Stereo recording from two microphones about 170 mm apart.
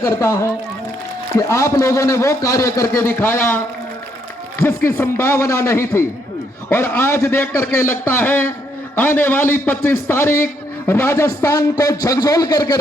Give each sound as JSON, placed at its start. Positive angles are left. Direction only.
{"t": 0.0, "sound": "a man's voice", "side_deg": 15}
{"t": 4.6, "sound": "a man's voice", "side_deg": 15}